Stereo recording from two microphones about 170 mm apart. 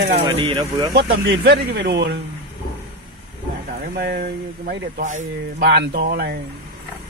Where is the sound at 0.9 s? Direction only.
80° right.